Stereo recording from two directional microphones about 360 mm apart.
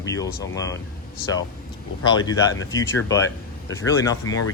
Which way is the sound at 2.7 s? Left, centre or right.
Centre.